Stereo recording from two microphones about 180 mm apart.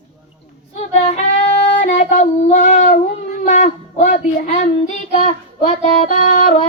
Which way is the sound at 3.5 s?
40° left (ahead or behind).